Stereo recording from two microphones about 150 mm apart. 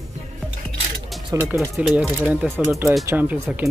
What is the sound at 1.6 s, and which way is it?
Speech, centre (ahead or behind).